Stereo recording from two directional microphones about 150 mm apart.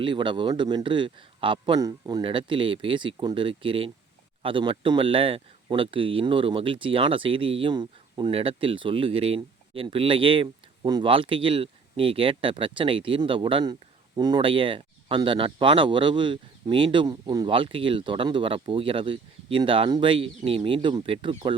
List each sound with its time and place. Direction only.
0.0 s speech: 35° right (ahead or behind)